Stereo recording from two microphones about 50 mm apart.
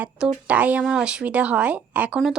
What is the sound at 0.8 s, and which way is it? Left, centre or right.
A woman's voice, centre.